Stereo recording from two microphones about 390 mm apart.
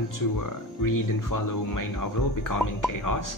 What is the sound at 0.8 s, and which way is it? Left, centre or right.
Speech, left.